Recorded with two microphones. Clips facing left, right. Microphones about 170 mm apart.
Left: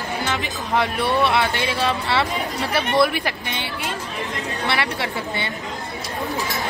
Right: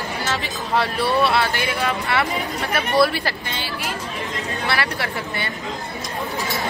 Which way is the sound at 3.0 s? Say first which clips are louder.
Right 2 dB; 15° left (ahead or behind).